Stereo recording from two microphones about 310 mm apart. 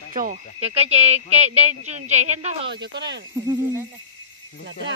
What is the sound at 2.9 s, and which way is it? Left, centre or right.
Speech, right.